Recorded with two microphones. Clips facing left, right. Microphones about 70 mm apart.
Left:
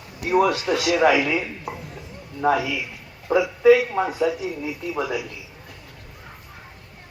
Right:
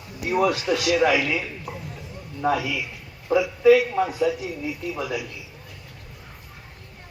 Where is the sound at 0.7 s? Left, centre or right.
Left.